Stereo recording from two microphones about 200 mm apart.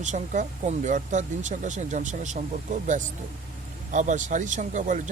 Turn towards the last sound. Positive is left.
turn(degrees=-40)  # may be behind; listen again after turning